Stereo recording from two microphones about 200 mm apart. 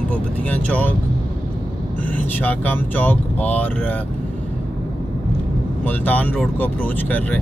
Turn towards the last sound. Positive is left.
turn(degrees=10)  # may be behind; listen again after turning